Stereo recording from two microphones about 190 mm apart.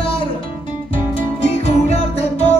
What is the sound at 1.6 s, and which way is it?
Music, 35° left (ahead or behind).